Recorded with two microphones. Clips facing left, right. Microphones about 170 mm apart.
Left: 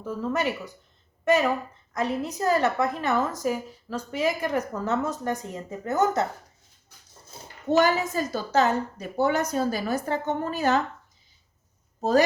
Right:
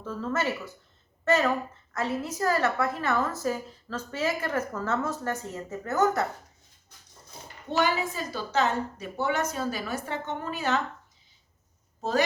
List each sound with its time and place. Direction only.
0.0 s a woman's voice: 15° left (ahead or behind)
7.7 s a woman's voice: 45° left (ahead or behind)
11.9 s speech: 40° left (ahead or behind)